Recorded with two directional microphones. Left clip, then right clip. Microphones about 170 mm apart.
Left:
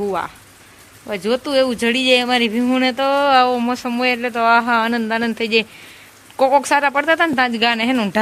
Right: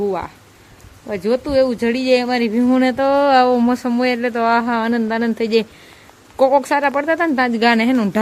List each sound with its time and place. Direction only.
0.0 s speech: 5° right (ahead or behind)
2.6 s speech: 15° right (ahead or behind)